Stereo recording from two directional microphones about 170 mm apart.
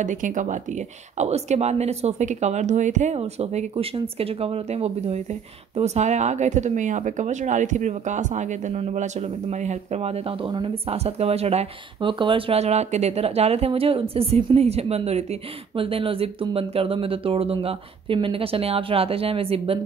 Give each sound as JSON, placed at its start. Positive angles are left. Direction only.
{"t": 0.0, "sound": "speech", "side_deg": -50}